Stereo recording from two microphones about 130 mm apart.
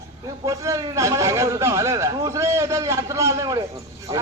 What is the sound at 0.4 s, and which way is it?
A man's voice, 25° right (ahead or behind).